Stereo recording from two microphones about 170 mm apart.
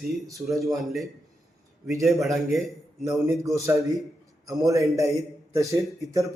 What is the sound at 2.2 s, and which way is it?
Speech, centre (ahead or behind).